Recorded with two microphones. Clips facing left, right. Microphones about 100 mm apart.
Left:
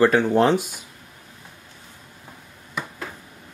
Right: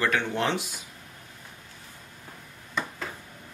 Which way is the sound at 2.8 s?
5° left (ahead or behind).